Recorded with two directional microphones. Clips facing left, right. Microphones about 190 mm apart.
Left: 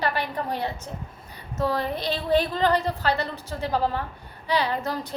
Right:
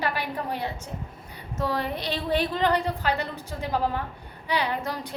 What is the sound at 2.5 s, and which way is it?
A woman's voice, 15° right (ahead or behind).